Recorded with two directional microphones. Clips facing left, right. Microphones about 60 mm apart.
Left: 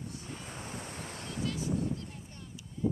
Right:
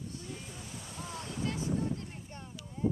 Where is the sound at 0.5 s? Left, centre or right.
Left.